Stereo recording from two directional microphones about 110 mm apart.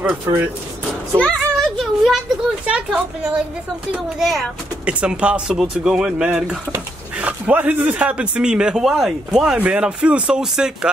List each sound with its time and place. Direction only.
0.0 s speech: 20° right (ahead or behind)
1.2 s a sound: centre (ahead or behind)
2.6 s speech: 10° right (ahead or behind)